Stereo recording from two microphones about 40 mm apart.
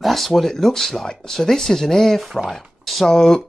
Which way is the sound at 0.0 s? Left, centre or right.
Centre.